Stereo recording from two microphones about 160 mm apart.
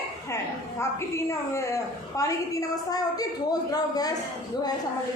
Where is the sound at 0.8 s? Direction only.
15° left (ahead or behind).